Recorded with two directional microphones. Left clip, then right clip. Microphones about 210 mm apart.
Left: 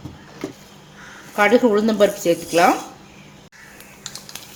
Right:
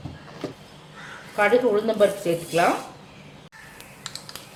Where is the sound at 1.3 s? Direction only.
45° left (ahead or behind).